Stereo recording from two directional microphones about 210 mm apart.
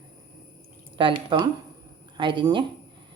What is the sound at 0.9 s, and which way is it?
A woman's voice, 25° right (ahead or behind).